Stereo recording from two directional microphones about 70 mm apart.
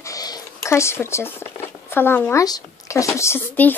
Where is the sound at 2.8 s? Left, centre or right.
Left.